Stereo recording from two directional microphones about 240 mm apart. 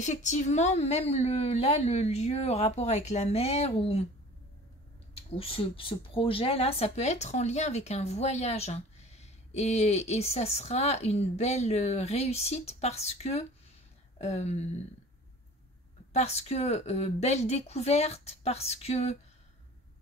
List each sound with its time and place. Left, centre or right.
0.0 s speech: left
5.1 s speech: left
16.1 s speech: left